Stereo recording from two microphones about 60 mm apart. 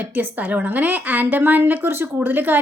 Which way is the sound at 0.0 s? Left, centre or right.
Right.